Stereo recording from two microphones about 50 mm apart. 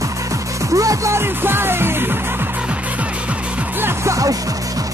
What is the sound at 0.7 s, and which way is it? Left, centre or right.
Music, right.